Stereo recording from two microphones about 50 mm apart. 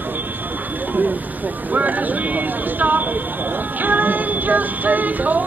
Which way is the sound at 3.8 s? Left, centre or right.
Right.